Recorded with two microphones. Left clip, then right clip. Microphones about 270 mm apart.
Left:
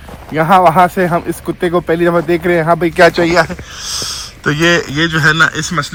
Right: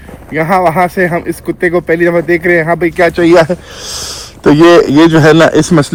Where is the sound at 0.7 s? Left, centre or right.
Centre.